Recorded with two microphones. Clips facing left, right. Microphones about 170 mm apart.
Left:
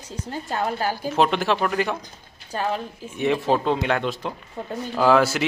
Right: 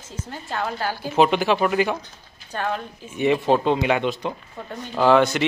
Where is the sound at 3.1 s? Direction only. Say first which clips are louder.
Right 2 dB; centre (ahead or behind).